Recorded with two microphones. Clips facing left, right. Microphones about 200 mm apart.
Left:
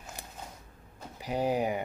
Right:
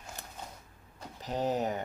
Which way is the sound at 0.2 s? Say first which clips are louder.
Left 1 dB; 15° left (ahead or behind).